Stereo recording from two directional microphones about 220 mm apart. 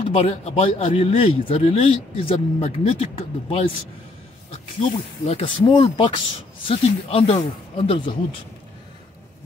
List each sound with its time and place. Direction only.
0.0 s speech: 25° left (ahead or behind)
5.2 s speech: 25° left (ahead or behind)